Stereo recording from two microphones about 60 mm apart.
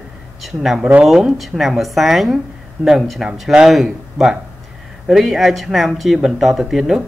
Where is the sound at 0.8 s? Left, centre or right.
Right.